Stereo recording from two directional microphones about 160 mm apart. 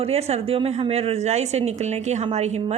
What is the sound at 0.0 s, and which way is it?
A woman's voice, 40° right (ahead or behind).